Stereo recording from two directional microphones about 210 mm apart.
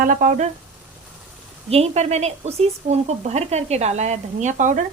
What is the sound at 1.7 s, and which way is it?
Speech, 30° right (ahead or behind).